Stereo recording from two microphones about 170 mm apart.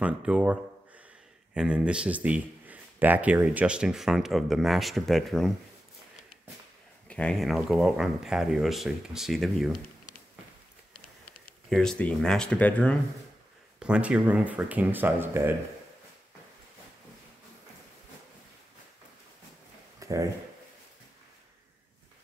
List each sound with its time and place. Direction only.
0.0 s speech: 5° right (ahead or behind)
7.1 s speech: 5° left (ahead or behind)
11.7 s speech: 5° left (ahead or behind)
13.7 s speech: 5° right (ahead or behind)
20.0 s a sound: 20° right (ahead or behind)